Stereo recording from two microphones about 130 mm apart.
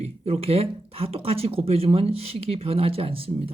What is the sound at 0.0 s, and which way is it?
Speech, 50° right (ahead or behind).